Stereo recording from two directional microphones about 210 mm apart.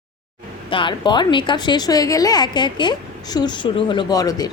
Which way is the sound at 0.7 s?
25° left (ahead or behind).